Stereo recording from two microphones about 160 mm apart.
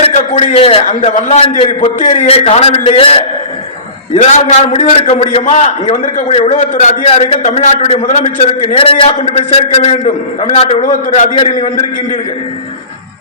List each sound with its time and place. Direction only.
0.0 s a man's voice: 40° left (ahead or behind)
1.8 s a man's voice: 50° left (ahead or behind)
2.2 s a man's voice: 40° left (ahead or behind)